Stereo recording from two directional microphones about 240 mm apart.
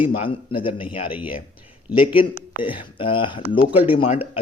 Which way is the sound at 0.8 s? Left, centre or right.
Centre.